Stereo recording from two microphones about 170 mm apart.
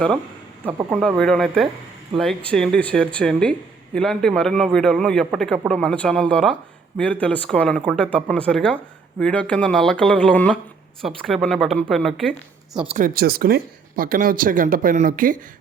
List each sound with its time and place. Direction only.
0.9 s speech: 5° left (ahead or behind)
13.0 s speech: 60° right (ahead or behind)